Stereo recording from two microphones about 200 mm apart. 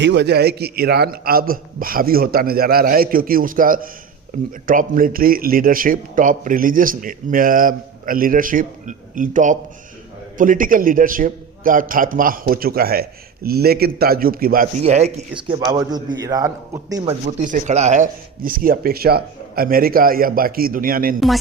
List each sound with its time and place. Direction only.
0.0 s speech: 60° right (ahead or behind); by 15.2 s 35° right (ahead or behind)
15.7 s a man's voice: 20° right (ahead or behind)
17.4 s speech: 35° right (ahead or behind)